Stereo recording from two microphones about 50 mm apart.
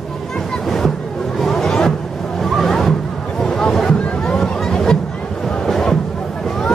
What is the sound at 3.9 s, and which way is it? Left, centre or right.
Boat, left.